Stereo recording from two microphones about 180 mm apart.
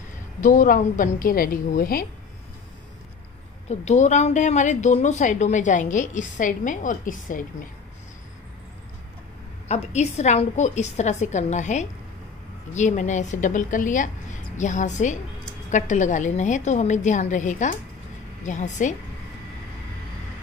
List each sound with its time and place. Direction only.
0.4 s a woman's voice: 50° left (ahead or behind)
3.6 s a woman's voice: 40° left (ahead or behind)
9.7 s a woman's voice: 40° left (ahead or behind)